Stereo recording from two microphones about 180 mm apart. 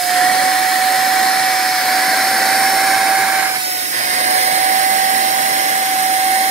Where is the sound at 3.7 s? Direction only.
40° right (ahead or behind).